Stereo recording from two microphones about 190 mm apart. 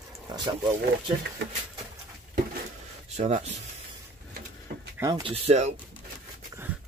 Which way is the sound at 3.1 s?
35° right (ahead or behind).